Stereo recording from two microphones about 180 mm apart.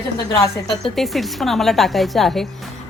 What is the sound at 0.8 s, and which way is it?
A woman's voice, centre (ahead or behind).